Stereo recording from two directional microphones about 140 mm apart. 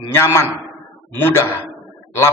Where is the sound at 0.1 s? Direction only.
20° left (ahead or behind).